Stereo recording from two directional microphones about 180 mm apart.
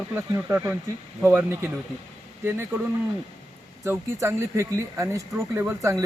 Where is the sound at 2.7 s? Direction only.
15° right (ahead or behind).